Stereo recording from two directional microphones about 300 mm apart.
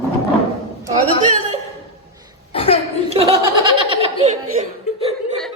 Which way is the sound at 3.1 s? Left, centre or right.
Centre.